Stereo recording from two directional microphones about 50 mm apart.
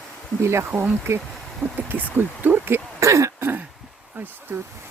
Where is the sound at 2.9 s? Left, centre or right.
Right.